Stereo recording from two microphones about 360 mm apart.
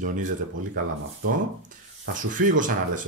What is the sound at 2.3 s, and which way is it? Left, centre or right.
Speech, right.